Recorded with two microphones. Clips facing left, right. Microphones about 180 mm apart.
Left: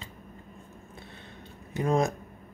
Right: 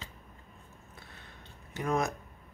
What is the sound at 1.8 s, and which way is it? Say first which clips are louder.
Speech: left 5 dB; 30° left (ahead or behind).